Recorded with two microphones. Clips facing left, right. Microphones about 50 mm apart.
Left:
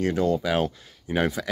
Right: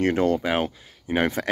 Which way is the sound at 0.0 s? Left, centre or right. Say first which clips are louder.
Right 2 dB; right.